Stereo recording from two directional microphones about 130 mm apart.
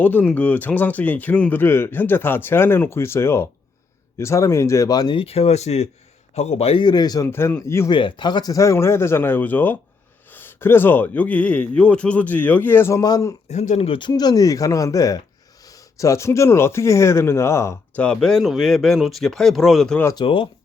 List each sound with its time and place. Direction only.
0.0 s speech: 10° left (ahead or behind); by 5.1 s 30° left (ahead or behind)
5.1 s a man's voice: 50° left (ahead or behind)
6.8 s speech: 30° left (ahead or behind)
7.3 s speech: 20° left (ahead or behind)
7.9 s speech: 40° left (ahead or behind)
13.5 s speech: 65° left (ahead or behind)
13.8 s a man's voice: 45° left (ahead or behind)
14.1 s speech: 30° left (ahead or behind)
18.0 s speech: 5° left (ahead or behind)
20.1 s a man's voice: 45° left (ahead or behind)